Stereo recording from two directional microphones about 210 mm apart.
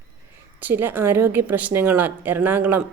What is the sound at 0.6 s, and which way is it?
A woman's voice, 10° right (ahead or behind).